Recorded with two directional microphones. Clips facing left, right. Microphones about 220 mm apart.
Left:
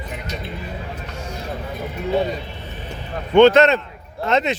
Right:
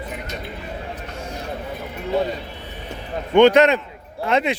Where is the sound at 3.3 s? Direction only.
15° right (ahead or behind).